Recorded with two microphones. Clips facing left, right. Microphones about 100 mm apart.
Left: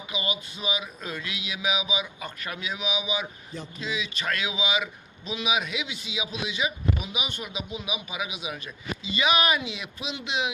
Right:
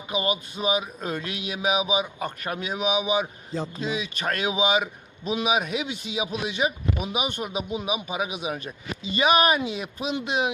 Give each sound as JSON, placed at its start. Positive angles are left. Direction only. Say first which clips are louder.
{"t": 0.1, "sound": "speech", "louder": "right 7 dB", "side_deg": -45}